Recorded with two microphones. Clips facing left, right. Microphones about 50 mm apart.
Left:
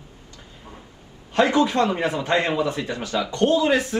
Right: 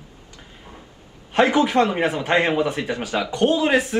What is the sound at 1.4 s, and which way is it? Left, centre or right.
Speech, right.